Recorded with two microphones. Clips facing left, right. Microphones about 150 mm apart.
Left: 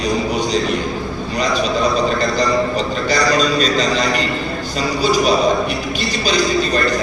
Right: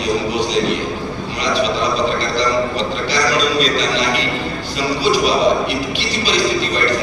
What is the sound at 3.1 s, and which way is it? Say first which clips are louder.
A man's voice: left 2 dB; 45° left (ahead or behind).